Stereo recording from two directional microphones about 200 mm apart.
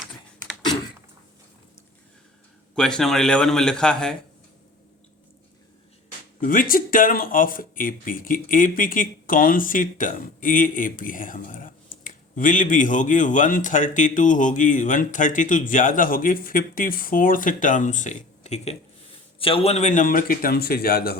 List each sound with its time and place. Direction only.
2.7 s a man's voice: 5° left (ahead or behind)
6.4 s a man's voice: 40° left (ahead or behind)